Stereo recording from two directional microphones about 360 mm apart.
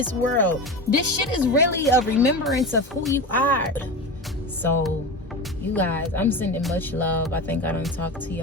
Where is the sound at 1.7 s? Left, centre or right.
Centre.